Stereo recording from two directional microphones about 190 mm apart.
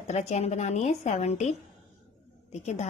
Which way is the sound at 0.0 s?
35° left (ahead or behind).